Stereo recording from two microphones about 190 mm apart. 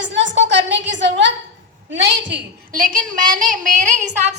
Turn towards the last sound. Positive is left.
turn(degrees=-40)  # may be behind; listen again after turning